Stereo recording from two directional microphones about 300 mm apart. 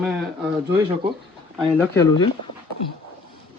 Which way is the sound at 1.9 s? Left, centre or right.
Centre.